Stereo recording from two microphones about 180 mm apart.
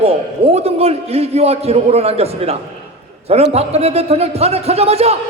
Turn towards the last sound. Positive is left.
turn(degrees=-35)  # may be behind; listen again after turning